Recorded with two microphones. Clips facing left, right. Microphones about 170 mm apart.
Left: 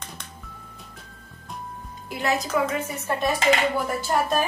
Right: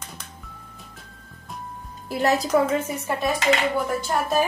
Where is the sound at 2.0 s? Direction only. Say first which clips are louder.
Right 4 dB; 40° right (ahead or behind).